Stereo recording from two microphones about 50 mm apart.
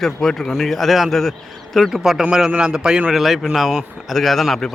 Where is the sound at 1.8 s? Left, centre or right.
Centre.